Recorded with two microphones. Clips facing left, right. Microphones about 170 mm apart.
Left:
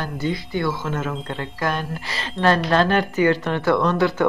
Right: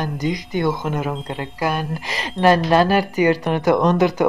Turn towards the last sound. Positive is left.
turn(degrees=-15)  # may be behind; listen again after turning